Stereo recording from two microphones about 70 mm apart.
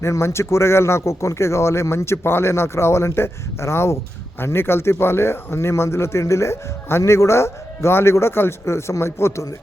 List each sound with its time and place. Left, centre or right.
0.0 s speech: left